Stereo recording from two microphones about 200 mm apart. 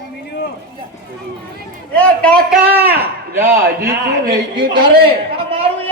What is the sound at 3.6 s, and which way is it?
A man's voice, 50° right (ahead or behind).